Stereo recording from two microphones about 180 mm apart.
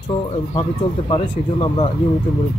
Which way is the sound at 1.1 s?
25° left (ahead or behind).